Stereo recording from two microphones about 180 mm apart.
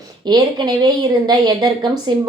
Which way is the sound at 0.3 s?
25° right (ahead or behind).